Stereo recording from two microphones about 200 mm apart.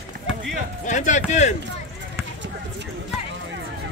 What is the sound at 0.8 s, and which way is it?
Speech, 35° left (ahead or behind).